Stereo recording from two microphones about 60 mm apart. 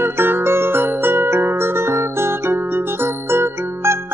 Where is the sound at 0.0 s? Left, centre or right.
Right.